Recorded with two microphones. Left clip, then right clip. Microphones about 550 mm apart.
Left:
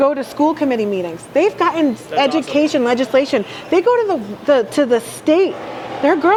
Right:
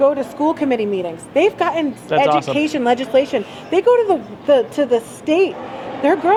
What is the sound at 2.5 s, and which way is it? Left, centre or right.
Speech, left.